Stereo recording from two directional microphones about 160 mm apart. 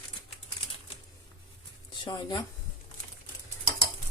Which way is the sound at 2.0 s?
30° left (ahead or behind).